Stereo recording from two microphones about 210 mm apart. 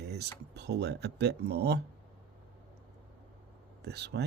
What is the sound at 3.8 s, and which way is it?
Speech, 55° right (ahead or behind).